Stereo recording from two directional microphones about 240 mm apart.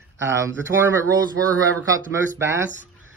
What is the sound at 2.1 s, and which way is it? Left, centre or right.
Speech, centre.